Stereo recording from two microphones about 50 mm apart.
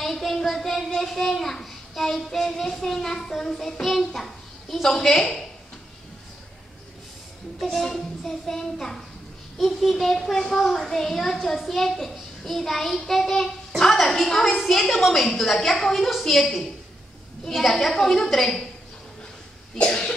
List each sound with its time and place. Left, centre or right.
0.0 s a child's voice: centre
8.2 s a woman's voice: centre
19.8 s cough: centre